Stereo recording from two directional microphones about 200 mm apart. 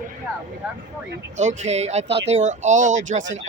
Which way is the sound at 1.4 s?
35° right (ahead or behind).